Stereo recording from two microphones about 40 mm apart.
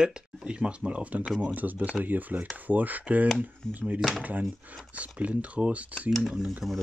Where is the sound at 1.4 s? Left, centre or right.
Right.